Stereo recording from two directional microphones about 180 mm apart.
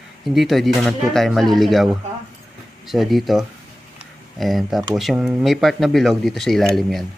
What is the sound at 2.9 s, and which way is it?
Speech, centre (ahead or behind).